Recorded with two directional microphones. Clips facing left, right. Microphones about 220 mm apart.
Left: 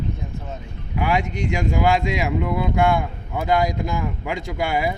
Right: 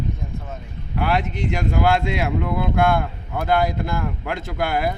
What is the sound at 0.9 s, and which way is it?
Speech, 10° left (ahead or behind).